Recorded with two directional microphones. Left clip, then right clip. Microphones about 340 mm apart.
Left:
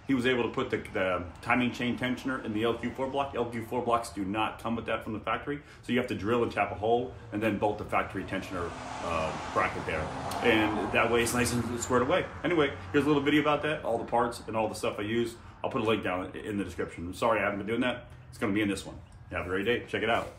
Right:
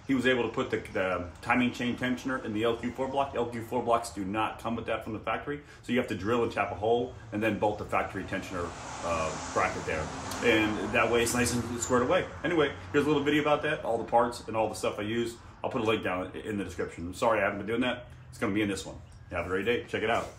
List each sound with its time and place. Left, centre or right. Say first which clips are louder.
0.1 s a man's voice: right 1 dB; centre
9.1 s speech: even; left
10.4 s a man's voice: even; centre